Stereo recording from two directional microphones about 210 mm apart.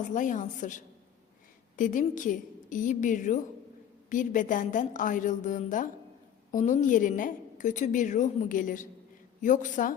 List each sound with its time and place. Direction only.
0.1 s a woman's voice: 35° left (ahead or behind)